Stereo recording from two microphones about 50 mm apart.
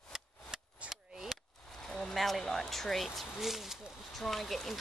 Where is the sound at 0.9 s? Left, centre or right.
Centre.